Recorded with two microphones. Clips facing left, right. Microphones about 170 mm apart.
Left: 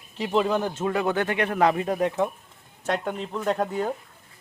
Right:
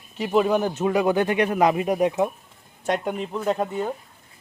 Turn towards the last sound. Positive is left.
turn(degrees=-5)  # may be behind; listen again after turning